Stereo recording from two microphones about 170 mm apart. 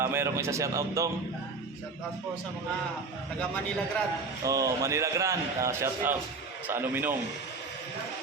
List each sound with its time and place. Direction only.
0.0 s a man's voice: 15° right (ahead or behind)
4.4 s a man's voice: 20° right (ahead or behind)